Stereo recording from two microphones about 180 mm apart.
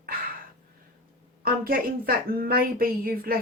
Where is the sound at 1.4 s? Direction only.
55° right (ahead or behind).